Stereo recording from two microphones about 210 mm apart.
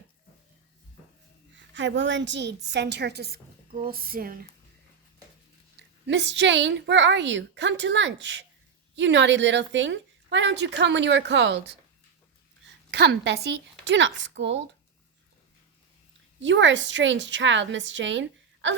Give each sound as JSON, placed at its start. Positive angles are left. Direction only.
{"t": 1.5, "sound": "a woman's voice", "side_deg": -60}
{"t": 6.1, "sound": "a woman's voice", "side_deg": -55}
{"t": 16.4, "sound": "a woman's voice", "side_deg": -60}